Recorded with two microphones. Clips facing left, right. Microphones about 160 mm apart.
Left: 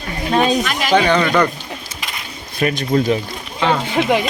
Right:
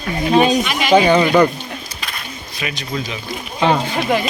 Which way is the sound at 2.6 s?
50° left (ahead or behind).